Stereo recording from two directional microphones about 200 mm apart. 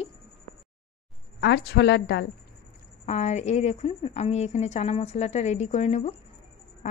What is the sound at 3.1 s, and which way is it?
A woman's voice, 35° left (ahead or behind).